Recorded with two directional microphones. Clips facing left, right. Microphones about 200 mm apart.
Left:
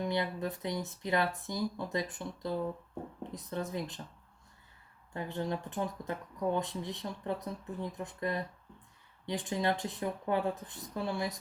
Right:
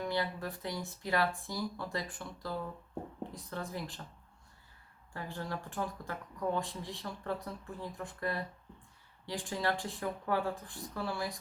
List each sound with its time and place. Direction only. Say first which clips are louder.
0.0 s speech: left 2 dB; 20° left (ahead or behind)
5.1 s speech: left 5 dB; 20° left (ahead or behind)